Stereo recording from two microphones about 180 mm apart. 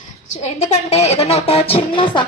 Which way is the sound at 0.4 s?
40° left (ahead or behind).